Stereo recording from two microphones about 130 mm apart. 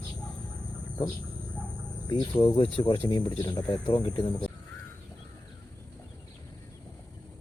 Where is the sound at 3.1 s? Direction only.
35° left (ahead or behind).